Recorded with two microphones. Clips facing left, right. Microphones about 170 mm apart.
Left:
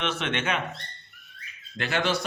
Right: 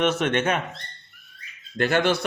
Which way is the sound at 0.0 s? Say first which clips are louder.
Right 7 dB; 45° right (ahead or behind).